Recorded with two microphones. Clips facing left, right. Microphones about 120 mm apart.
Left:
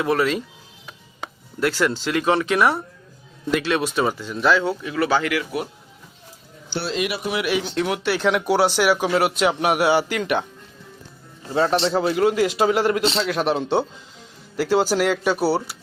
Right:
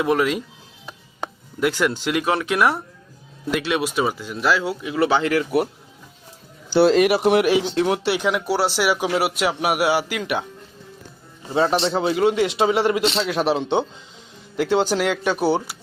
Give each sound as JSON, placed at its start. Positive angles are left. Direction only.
{"t": 0.0, "sound": "speech", "side_deg": -10}
{"t": 1.5, "sound": "speech", "side_deg": -15}
{"t": 2.3, "sound": "a man's voice", "side_deg": -5}
{"t": 4.9, "sound": "speech", "side_deg": -25}
{"t": 6.8, "sound": "speech", "side_deg": -50}
{"t": 7.5, "sound": "speech", "side_deg": -25}
{"t": 8.2, "sound": "a man's voice", "side_deg": 0}
{"t": 11.4, "sound": "a man's voice", "side_deg": -5}